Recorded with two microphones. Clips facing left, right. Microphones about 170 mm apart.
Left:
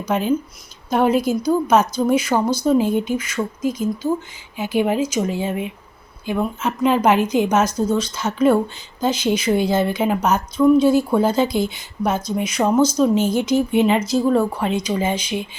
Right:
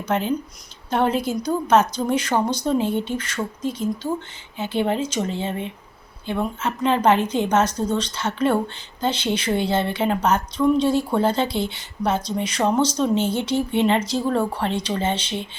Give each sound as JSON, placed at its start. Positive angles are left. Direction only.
{"t": 0.0, "sound": "a woman's voice", "side_deg": 10}
{"t": 13.3, "sound": "speech", "side_deg": -30}
{"t": 13.7, "sound": "a woman's voice", "side_deg": 10}